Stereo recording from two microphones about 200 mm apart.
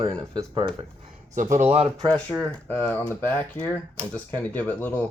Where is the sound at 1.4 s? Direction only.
40° right (ahead or behind).